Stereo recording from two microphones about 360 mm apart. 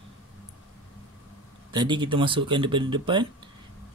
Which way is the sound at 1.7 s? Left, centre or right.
Centre.